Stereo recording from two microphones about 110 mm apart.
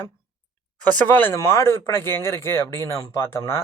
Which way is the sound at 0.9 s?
15° left (ahead or behind).